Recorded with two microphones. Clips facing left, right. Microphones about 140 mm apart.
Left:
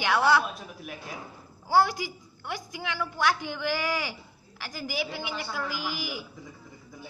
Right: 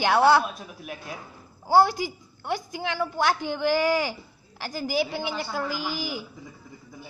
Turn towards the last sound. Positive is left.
turn(degrees=-30)  # may be behind; listen again after turning